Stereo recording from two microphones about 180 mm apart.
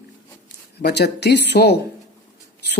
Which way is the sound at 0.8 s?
65° left (ahead or behind).